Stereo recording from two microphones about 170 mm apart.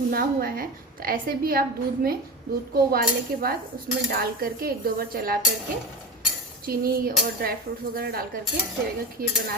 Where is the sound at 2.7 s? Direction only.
65° right (ahead or behind).